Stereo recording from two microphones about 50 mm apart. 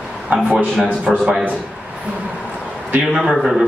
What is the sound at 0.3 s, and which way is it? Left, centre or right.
Speech, right.